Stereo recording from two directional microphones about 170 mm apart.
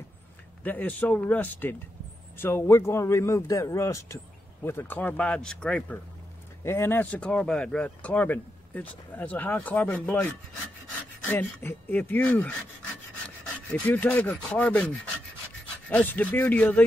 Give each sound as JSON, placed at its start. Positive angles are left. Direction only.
{"t": 0.7, "sound": "speech", "side_deg": 10}
{"t": 11.2, "sound": "speech", "side_deg": 10}
{"t": 13.7, "sound": "speech", "side_deg": 10}
{"t": 15.9, "sound": "speech", "side_deg": 10}